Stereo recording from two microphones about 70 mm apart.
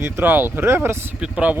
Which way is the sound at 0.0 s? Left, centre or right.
Right.